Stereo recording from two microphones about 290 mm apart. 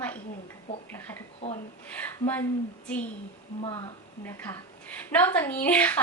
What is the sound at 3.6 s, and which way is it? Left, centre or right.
Speech, centre.